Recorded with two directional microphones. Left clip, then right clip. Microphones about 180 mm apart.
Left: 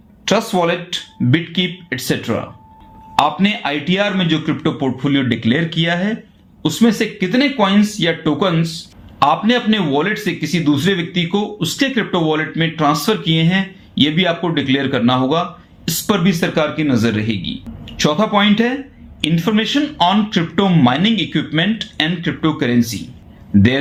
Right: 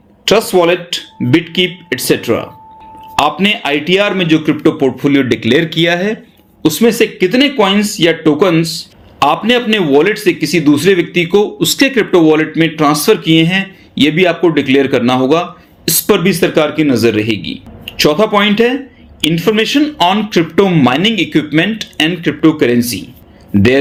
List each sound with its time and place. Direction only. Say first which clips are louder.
0.3 s speech: right 6 dB; 45° right (ahead or behind)